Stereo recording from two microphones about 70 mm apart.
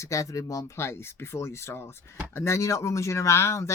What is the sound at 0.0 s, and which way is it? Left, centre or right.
Speech, left.